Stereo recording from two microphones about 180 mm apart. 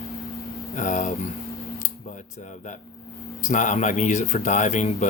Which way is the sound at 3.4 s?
45° left (ahead or behind).